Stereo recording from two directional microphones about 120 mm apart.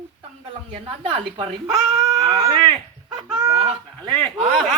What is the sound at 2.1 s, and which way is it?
Speech, 30° right (ahead or behind).